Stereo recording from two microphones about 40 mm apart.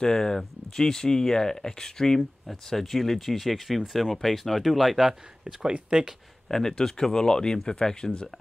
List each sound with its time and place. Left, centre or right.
0.0 s speech: centre; by 6.0 s right
6.5 s speech: centre